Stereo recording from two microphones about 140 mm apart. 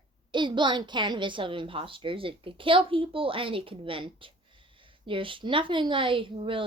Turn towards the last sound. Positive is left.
turn(degrees=-40)  # may be behind; listen again after turning